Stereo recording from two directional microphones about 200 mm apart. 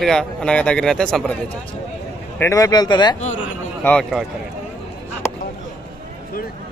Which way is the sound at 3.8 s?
5° left (ahead or behind).